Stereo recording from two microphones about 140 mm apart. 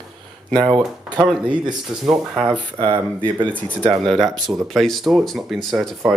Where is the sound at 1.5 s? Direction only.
5° right (ahead or behind).